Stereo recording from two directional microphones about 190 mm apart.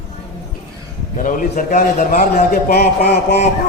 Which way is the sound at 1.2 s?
45° left (ahead or behind).